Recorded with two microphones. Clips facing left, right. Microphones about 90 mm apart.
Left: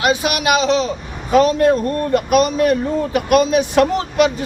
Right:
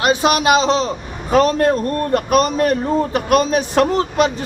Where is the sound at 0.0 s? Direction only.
35° right (ahead or behind).